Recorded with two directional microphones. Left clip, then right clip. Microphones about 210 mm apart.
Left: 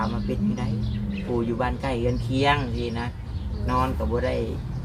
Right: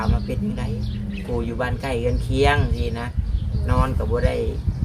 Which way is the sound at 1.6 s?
30° right (ahead or behind).